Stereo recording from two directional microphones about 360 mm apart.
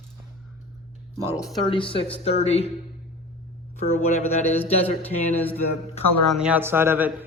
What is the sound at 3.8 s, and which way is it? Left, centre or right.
Speech, centre.